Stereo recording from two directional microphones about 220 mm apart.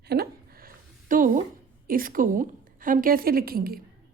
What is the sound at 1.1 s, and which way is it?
A woman's voice, 35° right (ahead or behind).